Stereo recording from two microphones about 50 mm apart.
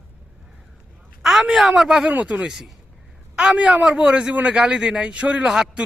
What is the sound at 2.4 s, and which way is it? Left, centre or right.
Speech, centre.